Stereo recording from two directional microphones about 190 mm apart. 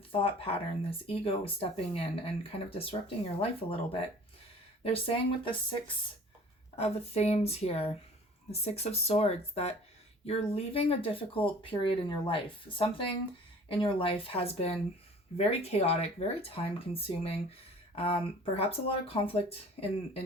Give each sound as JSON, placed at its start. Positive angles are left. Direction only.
{"t": 0.1, "sound": "speech", "side_deg": 30}